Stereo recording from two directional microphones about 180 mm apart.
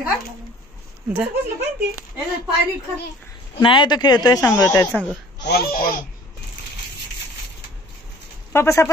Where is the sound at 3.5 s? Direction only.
25° left (ahead or behind).